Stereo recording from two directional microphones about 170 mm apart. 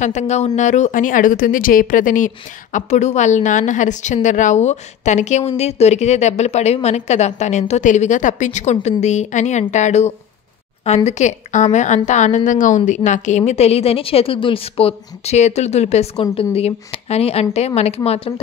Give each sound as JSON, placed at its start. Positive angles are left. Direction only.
{"t": 0.0, "sound": "a woman's voice", "side_deg": 45}